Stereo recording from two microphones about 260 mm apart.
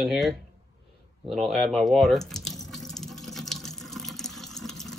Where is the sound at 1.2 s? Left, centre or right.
Centre.